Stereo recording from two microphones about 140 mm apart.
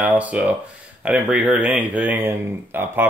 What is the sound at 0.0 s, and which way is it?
Speech, 10° right (ahead or behind).